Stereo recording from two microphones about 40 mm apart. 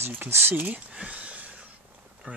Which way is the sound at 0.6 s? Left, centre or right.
Right.